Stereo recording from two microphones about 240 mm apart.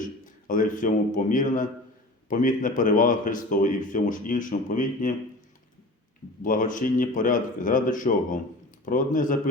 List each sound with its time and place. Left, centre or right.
0.0 s a man's voice: left
6.4 s speech: left